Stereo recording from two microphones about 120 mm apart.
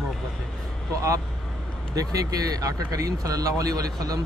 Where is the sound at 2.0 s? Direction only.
30° right (ahead or behind).